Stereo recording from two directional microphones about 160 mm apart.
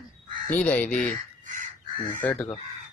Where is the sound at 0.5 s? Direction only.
10° left (ahead or behind).